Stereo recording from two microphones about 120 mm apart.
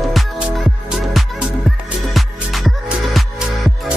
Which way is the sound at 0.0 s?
Centre (ahead or behind).